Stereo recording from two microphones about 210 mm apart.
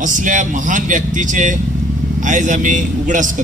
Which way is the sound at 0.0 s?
40° right (ahead or behind).